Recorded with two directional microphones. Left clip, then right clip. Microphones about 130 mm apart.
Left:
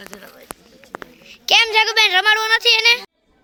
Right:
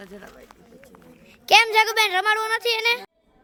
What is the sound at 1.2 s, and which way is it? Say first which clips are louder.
Speech: left 1 dB; 5° right (ahead or behind).